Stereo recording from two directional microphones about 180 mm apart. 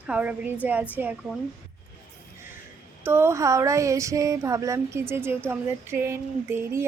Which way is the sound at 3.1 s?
15° right (ahead or behind).